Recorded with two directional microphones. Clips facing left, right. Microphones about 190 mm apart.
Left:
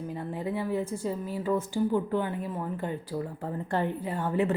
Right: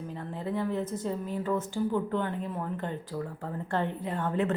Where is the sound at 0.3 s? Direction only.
10° left (ahead or behind).